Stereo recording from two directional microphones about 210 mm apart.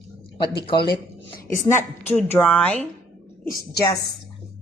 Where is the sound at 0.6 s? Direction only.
25° left (ahead or behind).